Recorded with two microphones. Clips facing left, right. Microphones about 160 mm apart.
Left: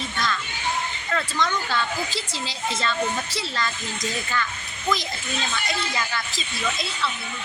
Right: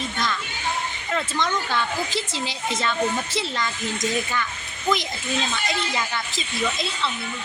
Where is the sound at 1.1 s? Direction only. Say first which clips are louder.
Right 1 dB; 20° right (ahead or behind).